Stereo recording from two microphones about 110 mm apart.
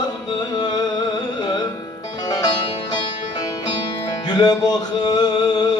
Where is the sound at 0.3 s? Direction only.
40° left (ahead or behind).